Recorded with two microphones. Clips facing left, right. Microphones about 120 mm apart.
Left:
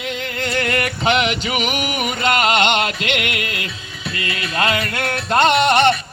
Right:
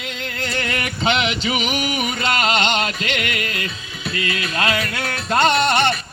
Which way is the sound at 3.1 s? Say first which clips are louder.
Left 2 dB; 60° left (ahead or behind).